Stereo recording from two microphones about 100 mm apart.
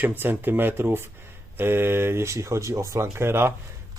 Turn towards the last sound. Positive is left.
turn(degrees=-25)  # may be behind; listen again after turning